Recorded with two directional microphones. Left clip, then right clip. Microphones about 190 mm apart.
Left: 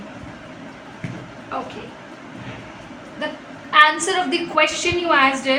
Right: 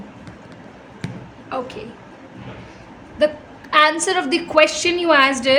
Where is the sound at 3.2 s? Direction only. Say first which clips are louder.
Right 10 dB; 60° right (ahead or behind).